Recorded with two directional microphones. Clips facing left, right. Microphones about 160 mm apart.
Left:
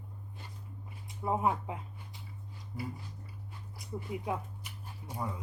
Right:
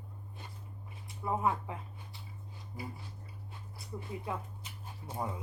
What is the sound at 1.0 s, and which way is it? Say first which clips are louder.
Speech: left 2 dB; 20° left (ahead or behind).